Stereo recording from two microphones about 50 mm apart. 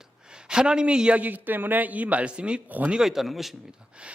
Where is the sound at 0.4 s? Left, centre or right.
Centre.